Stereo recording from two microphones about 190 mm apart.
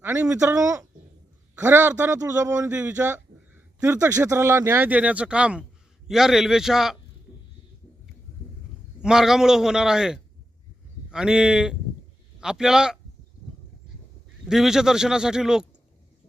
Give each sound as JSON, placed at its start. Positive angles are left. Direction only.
{"t": 0.0, "sound": "a man's voice", "side_deg": -15}
{"t": 9.0, "sound": "a man's voice", "side_deg": -5}
{"t": 14.4, "sound": "a man's voice", "side_deg": 0}